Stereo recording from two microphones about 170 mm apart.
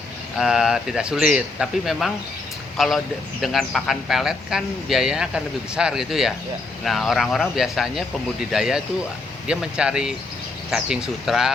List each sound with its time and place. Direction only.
0.3 s speech: 5° right (ahead or behind)